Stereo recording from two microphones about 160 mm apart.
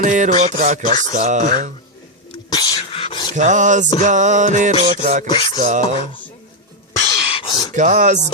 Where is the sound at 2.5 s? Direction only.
25° left (ahead or behind).